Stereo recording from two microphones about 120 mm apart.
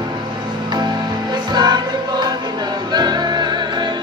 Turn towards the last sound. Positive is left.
turn(degrees=-40)  # may be behind; listen again after turning